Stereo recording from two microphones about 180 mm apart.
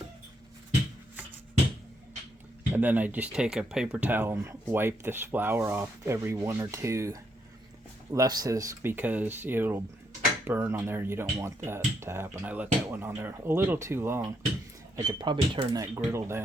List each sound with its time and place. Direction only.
2.7 s speech: 10° right (ahead or behind)
14.9 s speech: 25° right (ahead or behind)